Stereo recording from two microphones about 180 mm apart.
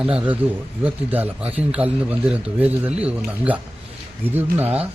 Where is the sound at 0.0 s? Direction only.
5° right (ahead or behind).